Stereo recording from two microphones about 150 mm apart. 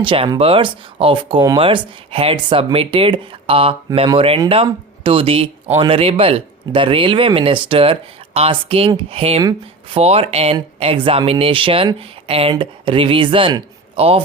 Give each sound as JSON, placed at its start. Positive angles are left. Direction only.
{"t": 0.0, "sound": "speech", "side_deg": -35}